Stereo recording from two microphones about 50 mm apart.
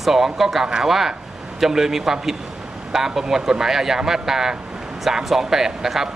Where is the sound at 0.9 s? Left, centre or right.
Centre.